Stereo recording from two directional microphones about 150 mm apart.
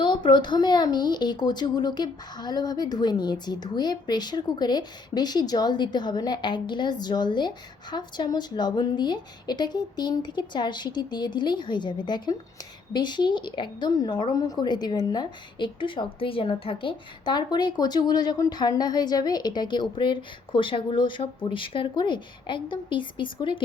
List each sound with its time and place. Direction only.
0.0 s a woman's voice: 30° left (ahead or behind)